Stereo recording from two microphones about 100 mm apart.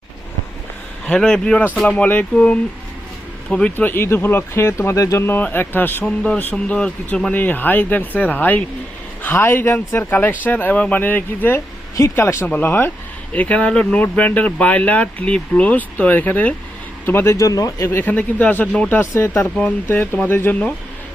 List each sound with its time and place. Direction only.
1.0 s speech: 10° left (ahead or behind)
17.3 s speech: 35° left (ahead or behind)
17.8 s speech: 20° left (ahead or behind)
19.1 s speech: 25° left (ahead or behind)